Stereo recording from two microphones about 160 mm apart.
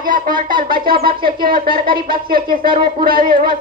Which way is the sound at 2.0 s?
65° right (ahead or behind).